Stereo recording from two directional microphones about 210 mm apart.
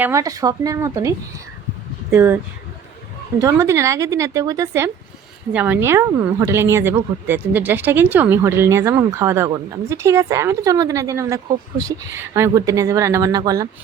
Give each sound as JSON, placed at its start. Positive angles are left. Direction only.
{"t": 0.0, "sound": "a woman's voice", "side_deg": -15}
{"t": 2.1, "sound": "a woman's voice", "side_deg": -15}
{"t": 3.4, "sound": "a woman's voice", "side_deg": -15}